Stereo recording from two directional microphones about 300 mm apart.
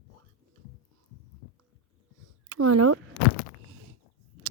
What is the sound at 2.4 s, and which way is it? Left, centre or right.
Speech, right.